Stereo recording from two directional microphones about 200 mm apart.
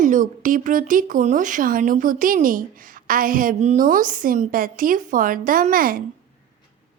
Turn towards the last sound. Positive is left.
turn(degrees=-45)  # may be behind; listen again after turning